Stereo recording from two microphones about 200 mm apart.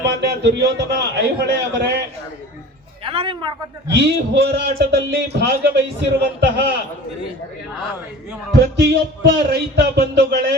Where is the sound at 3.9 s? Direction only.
60° right (ahead or behind).